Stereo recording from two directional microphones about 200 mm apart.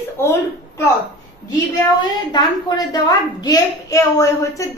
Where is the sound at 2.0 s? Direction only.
20° left (ahead or behind).